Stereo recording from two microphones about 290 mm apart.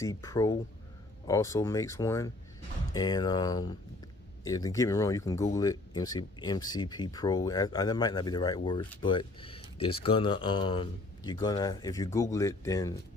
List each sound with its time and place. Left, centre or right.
0.0 s speech: centre